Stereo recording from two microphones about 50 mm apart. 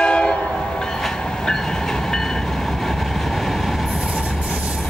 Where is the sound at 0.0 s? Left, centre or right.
Centre.